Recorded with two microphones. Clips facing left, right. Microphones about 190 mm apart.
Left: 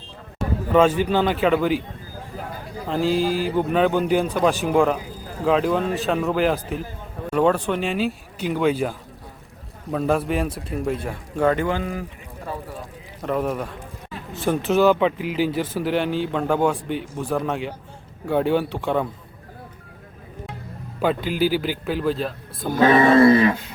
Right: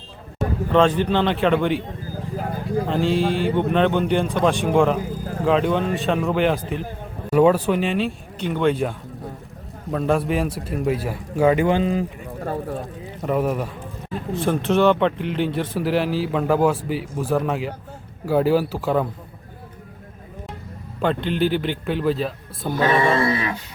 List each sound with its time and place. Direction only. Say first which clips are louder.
0.7 s a man's voice: left 1 dB; 5° left (ahead or behind)
2.8 s a man's voice: left 1 dB; centre (ahead or behind); by 12.0 s 20° right (ahead or behind)
13.2 s a man's voice: right 2 dB; 5° right (ahead or behind)
21.0 s a man's voice: even; 5° left (ahead or behind)
22.7 s speech: left 4 dB; 45° left (ahead or behind)